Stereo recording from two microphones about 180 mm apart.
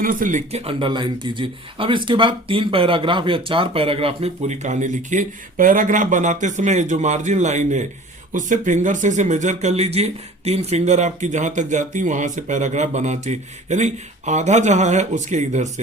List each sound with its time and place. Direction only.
0.0 s speech: 50° right (ahead or behind)